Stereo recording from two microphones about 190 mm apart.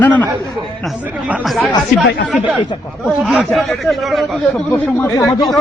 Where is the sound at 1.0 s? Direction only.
5° right (ahead or behind).